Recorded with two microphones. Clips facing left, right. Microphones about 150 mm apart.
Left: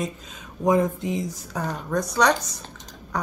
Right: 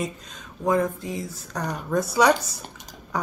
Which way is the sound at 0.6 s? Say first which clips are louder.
Left 2 dB; 20° left (ahead or behind).